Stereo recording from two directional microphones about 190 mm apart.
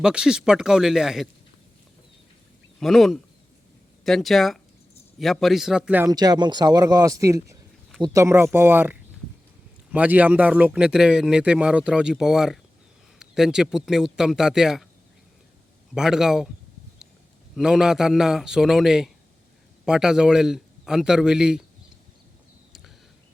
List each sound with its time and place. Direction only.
0.0 s speech: 5° right (ahead or behind)
2.8 s speech: centre (ahead or behind)
6.1 s speech: 20° right (ahead or behind); by 14.8 s centre (ahead or behind)
16.0 s speech: 5° right (ahead or behind)
17.5 s speech: 5° right (ahead or behind)